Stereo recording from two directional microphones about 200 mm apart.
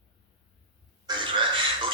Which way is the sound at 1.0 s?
25° right (ahead or behind).